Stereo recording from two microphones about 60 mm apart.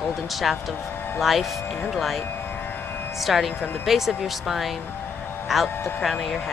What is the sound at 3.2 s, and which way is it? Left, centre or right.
Speech, centre.